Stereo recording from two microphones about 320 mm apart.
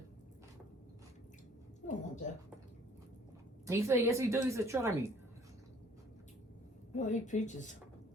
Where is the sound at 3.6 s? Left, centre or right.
Centre.